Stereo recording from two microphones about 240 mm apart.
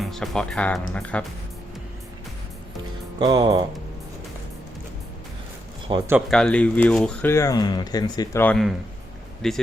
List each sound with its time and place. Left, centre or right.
0.0 s speech: centre
3.2 s speech: centre
5.9 s speech: centre
6.3 s speech: centre